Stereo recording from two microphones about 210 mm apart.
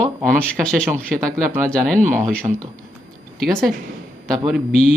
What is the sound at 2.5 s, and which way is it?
Speech, 20° right (ahead or behind).